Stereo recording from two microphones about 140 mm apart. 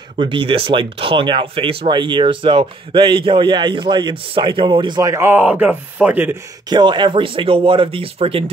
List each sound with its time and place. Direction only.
0.2 s speech: 35° right (ahead or behind); by 6.3 s 10° right (ahead or behind)
6.7 s speech: 35° right (ahead or behind)